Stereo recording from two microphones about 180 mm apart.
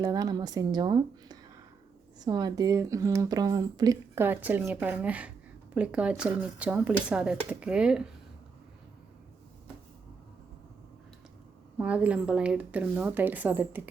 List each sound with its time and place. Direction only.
0.0 s speech: 20° right (ahead or behind)
11.8 s speech: 5° right (ahead or behind)